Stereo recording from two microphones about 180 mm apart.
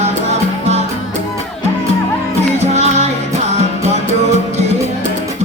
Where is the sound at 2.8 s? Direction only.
40° right (ahead or behind).